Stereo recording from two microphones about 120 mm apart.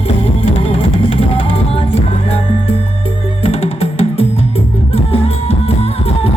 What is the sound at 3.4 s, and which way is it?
Music, 60° left (ahead or behind).